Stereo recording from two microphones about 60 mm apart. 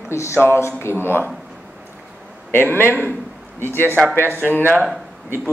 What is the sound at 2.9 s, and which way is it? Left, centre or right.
Speech, right.